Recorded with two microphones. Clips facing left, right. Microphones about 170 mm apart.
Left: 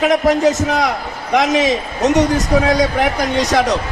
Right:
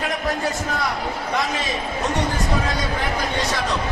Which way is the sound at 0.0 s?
90° left.